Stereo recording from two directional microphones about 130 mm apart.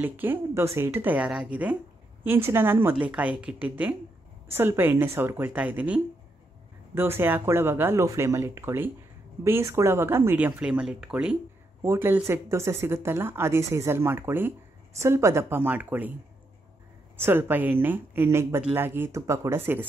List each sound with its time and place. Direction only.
0.0 s speech: 15° right (ahead or behind)
11.8 s speech: 20° right (ahead or behind)
17.2 s speech: 15° right (ahead or behind)